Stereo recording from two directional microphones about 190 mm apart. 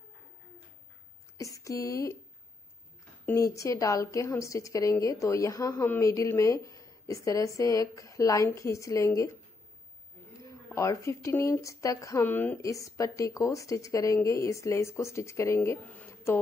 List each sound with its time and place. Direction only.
1.4 s speech: 15° left (ahead or behind)
3.3 s a woman's voice: 15° left (ahead or behind)
10.4 s a woman's voice: 15° left (ahead or behind)